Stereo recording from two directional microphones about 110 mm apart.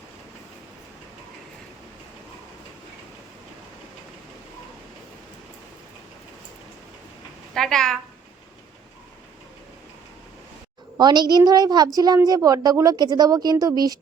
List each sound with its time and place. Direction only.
7.5 s a woman's voice: 5° left (ahead or behind)
10.9 s speech: 40° right (ahead or behind)